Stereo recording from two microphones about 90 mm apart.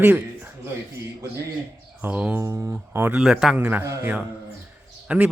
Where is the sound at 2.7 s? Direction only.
20° right (ahead or behind).